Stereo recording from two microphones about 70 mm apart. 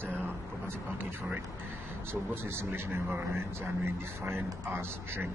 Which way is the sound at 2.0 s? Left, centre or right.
Right.